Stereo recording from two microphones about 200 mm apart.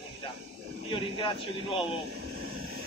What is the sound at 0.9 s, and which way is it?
Speech, 25° left (ahead or behind).